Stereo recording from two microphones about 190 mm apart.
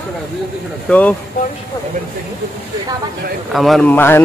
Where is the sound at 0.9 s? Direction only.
5° left (ahead or behind).